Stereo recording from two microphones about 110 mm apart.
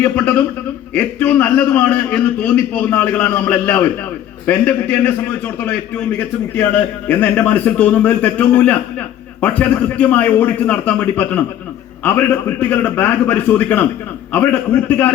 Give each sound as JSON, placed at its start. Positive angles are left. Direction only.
{"t": 0.0, "sound": "a man's voice", "side_deg": 15}
{"t": 7.1, "sound": "a man's voice", "side_deg": 15}